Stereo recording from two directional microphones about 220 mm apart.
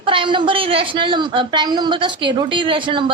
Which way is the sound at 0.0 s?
20° right (ahead or behind).